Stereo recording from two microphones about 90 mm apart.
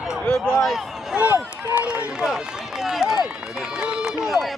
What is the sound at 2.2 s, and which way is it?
Run, 5° right (ahead or behind).